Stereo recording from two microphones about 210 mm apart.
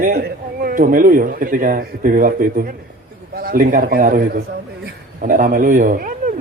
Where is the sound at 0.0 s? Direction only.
40° right (ahead or behind).